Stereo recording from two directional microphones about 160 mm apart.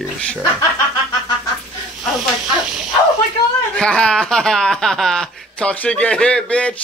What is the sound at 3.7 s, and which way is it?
Speech, 5° left (ahead or behind).